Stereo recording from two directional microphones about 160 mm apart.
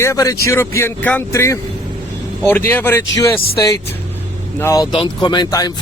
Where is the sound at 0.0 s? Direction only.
20° left (ahead or behind).